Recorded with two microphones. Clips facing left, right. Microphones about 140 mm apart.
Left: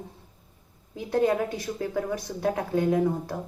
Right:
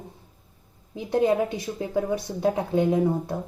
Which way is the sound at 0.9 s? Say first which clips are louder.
Right 2 dB; 20° right (ahead or behind).